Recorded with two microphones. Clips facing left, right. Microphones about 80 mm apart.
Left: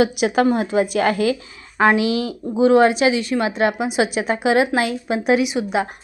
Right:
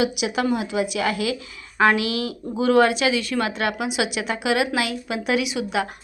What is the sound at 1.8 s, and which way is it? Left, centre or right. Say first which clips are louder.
A woman's voice: left 3 dB; left.